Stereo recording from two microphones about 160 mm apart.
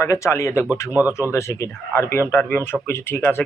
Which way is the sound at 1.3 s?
15° left (ahead or behind).